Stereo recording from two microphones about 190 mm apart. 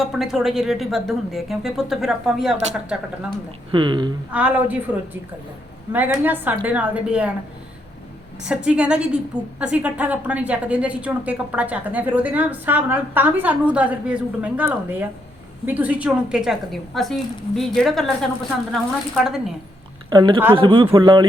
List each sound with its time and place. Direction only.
0.0 s speech: centre (ahead or behind)
3.7 s speech: 25° right (ahead or behind)
4.3 s a woman's voice: 10° right (ahead or behind)
5.9 s a woman's voice: 10° right (ahead or behind)
8.4 s a woman's voice: 5° right (ahead or behind)
20.1 s speech: 25° right (ahead or behind)